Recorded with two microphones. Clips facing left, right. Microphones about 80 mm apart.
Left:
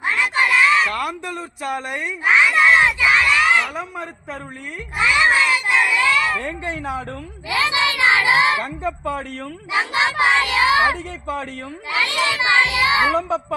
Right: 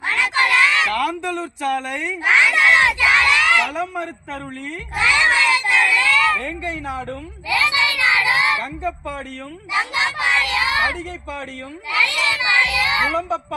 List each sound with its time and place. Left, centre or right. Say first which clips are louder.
0.0 s a sound: even; centre
4.9 s crowd: left 1 dB; centre
6.4 s a child's voice: even; left